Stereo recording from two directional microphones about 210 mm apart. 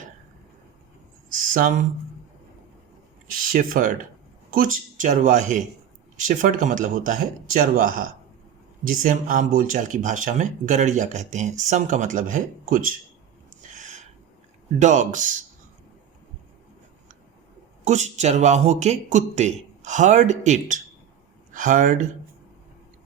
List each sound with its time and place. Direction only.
1.3 s a sound: 40° right (ahead or behind)
3.3 s speech: 40° right (ahead or behind)
13.6 s gasp: 35° right (ahead or behind)
14.8 s speech: 35° right (ahead or behind)
17.8 s speech: 35° right (ahead or behind)